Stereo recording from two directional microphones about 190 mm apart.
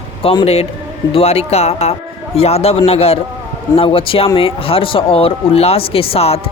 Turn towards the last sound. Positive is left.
turn(degrees=30)  # may be behind; listen again after turning